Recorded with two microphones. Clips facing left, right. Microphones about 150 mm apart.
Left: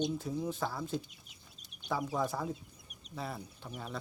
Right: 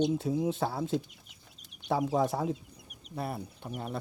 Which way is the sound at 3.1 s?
55° right (ahead or behind).